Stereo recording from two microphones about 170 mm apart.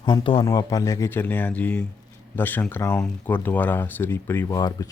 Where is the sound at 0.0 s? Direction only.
30° left (ahead or behind).